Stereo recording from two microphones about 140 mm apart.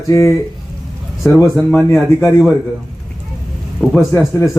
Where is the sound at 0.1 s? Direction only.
20° left (ahead or behind).